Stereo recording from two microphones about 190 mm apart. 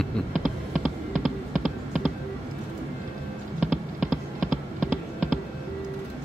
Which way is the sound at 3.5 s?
5° right (ahead or behind).